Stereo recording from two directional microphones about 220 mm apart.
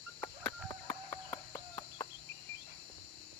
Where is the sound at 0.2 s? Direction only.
15° left (ahead or behind).